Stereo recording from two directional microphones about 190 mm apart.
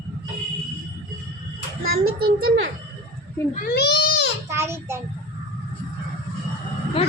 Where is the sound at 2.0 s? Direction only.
90° right.